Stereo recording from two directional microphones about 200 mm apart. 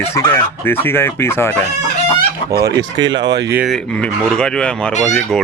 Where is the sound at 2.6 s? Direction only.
20° right (ahead or behind).